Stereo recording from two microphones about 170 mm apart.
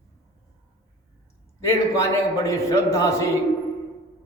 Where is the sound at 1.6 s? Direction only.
20° left (ahead or behind).